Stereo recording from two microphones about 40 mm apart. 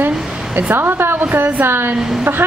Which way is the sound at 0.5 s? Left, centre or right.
Right.